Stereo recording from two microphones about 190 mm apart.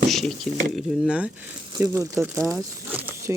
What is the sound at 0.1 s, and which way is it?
Speech, centre (ahead or behind).